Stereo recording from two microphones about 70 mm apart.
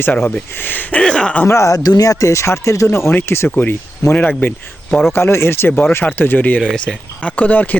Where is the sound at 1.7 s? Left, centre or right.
Left.